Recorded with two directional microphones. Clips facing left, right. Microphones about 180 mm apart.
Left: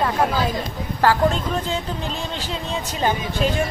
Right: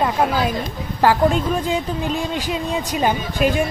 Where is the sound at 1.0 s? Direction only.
15° right (ahead or behind).